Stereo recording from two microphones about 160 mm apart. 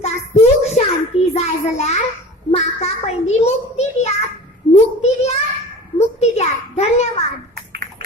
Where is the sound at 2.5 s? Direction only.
40° left (ahead or behind).